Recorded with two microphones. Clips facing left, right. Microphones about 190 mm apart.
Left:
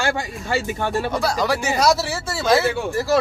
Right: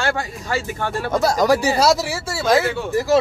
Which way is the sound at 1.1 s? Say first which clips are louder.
Right 9 dB; 45° right (ahead or behind).